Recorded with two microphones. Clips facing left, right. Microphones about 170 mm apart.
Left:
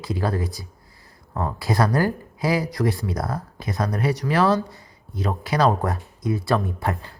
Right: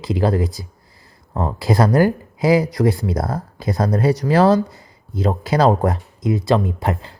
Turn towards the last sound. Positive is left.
turn(degrees=-20)  # may be behind; listen again after turning